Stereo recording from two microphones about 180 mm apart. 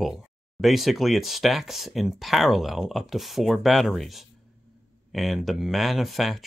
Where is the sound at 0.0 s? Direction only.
5° right (ahead or behind).